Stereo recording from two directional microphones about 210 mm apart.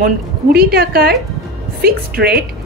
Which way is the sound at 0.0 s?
45° right (ahead or behind).